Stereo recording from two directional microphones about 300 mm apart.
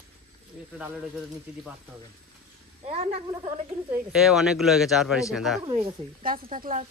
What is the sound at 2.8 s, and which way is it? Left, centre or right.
Speech, centre.